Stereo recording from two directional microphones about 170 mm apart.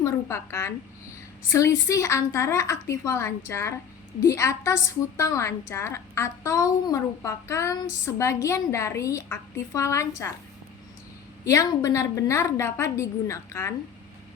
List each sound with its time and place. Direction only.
0.0 s a woman's voice: 15° left (ahead or behind)
11.4 s a woman's voice: 20° left (ahead or behind)